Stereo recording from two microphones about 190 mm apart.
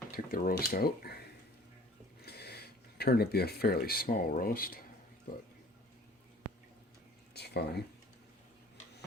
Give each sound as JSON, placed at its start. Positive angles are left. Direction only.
{"t": 0.1, "sound": "speech", "side_deg": 50}
{"t": 2.2, "sound": "speech", "side_deg": 60}
{"t": 7.3, "sound": "a sound", "side_deg": 60}